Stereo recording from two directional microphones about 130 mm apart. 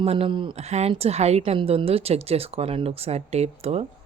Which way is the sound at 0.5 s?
55° right (ahead or behind).